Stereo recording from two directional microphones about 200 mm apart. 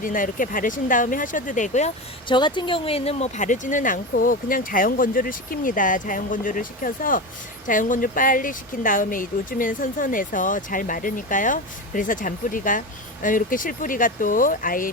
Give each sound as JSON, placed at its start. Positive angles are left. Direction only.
{"t": 0.0, "sound": "speech", "side_deg": 40}
{"t": 2.2, "sound": "speech", "side_deg": 25}